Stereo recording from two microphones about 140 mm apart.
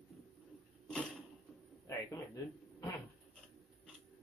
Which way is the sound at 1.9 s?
20° left (ahead or behind).